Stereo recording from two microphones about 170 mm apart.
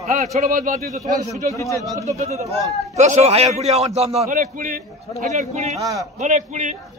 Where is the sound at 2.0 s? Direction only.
40° right (ahead or behind).